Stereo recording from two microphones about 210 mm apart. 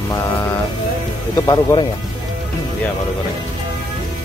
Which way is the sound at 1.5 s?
15° left (ahead or behind).